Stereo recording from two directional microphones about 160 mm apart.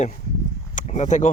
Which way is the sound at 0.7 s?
50° left (ahead or behind).